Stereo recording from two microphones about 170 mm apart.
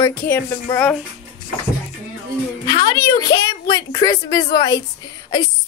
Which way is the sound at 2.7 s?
25° left (ahead or behind).